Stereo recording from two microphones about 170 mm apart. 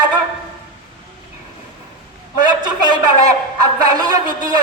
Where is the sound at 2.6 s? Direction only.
25° right (ahead or behind).